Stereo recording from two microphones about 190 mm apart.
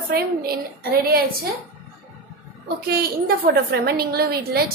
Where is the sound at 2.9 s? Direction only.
55° right (ahead or behind).